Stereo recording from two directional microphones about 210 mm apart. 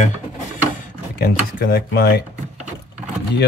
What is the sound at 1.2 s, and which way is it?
Speech, 45° left (ahead or behind).